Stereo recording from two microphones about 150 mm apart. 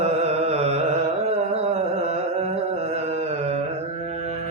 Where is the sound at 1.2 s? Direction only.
45° right (ahead or behind).